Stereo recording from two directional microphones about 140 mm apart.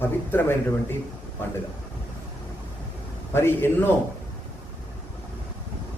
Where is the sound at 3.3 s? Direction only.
15° left (ahead or behind).